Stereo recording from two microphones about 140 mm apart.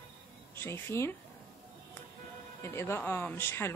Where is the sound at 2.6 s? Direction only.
15° left (ahead or behind).